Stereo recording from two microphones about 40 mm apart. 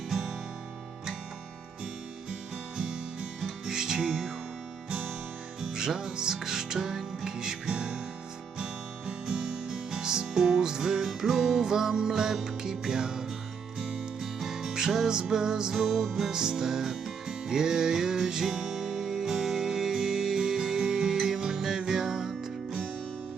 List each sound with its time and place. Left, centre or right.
0.1 s music: centre
2.7 s music: right
15.7 s music: centre